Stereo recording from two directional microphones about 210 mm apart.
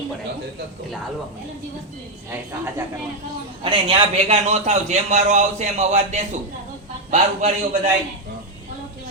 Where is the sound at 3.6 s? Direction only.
25° right (ahead or behind).